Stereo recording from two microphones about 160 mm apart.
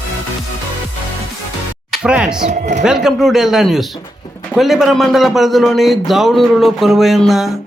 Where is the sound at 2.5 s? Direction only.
45° right (ahead or behind).